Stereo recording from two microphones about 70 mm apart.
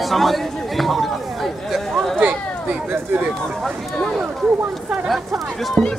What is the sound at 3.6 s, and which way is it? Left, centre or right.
Speech, centre.